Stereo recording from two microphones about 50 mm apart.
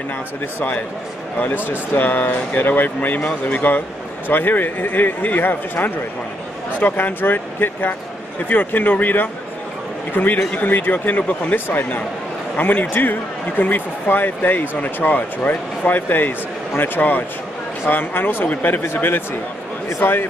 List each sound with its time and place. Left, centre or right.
1.7 s speech: left
4.3 s speech: left
11.5 s a man's voice: left